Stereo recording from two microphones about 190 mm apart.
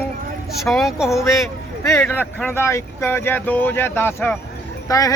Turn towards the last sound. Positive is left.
turn(degrees=20)  # may be behind; listen again after turning